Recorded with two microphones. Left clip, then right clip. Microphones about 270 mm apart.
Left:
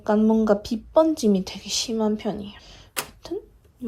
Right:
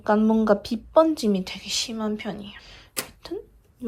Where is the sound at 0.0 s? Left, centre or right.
Centre.